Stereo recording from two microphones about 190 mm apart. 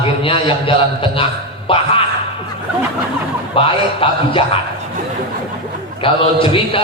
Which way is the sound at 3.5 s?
30° left (ahead or behind).